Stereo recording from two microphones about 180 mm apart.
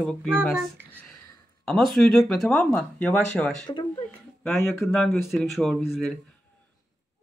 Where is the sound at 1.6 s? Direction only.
Centre (ahead or behind).